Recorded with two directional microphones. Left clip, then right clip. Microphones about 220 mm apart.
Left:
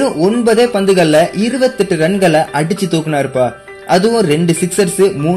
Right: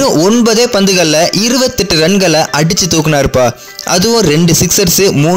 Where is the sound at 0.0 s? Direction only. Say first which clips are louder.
Right 4 dB; 40° right (ahead or behind).